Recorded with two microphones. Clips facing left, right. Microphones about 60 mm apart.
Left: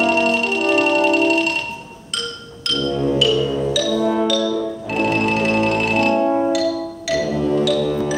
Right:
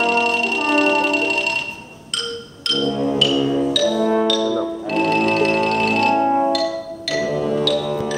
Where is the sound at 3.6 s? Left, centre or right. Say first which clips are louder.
Right 1 dB; centre.